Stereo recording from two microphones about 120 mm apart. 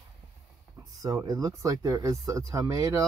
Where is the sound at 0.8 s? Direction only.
30° right (ahead or behind).